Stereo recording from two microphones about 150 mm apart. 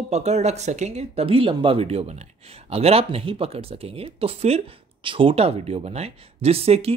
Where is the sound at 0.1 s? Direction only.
45° right (ahead or behind).